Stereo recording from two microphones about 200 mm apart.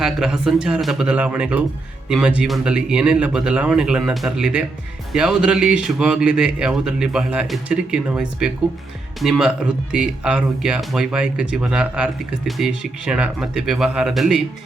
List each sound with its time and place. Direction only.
0.0 s a man's voice: centre (ahead or behind)